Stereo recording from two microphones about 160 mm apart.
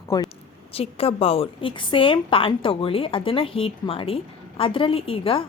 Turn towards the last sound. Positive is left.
turn(degrees=35)  # may be behind; listen again after turning